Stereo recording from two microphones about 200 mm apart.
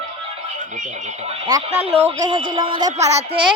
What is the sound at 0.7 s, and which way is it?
Speech, 35° right (ahead or behind).